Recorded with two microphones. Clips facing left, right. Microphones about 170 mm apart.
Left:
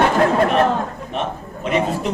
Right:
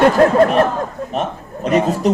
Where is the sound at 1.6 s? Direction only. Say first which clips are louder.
Right 4 dB; 40° right (ahead or behind).